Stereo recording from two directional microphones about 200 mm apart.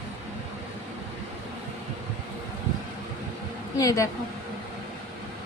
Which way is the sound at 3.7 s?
15° left (ahead or behind).